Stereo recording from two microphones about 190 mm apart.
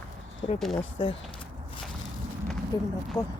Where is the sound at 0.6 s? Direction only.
Centre (ahead or behind).